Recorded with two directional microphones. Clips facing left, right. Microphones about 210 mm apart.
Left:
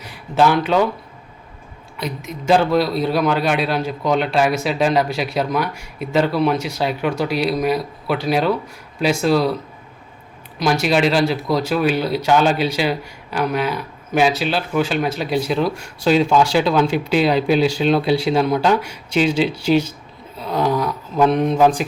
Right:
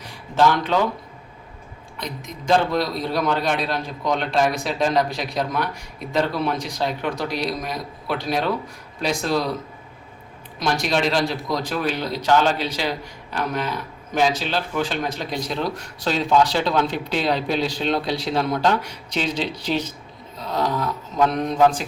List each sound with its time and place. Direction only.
0.3 s speech: 10° left (ahead or behind)
2.5 s a man's voice: 5° left (ahead or behind)
10.6 s speech: 5° left (ahead or behind)